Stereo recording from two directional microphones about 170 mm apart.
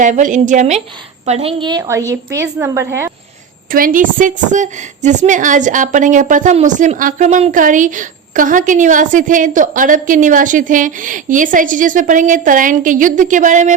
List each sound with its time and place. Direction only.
0.0 s a woman's voice: 45° right (ahead or behind); by 3.1 s 15° right (ahead or behind)
3.7 s a woman's voice: 55° right (ahead or behind)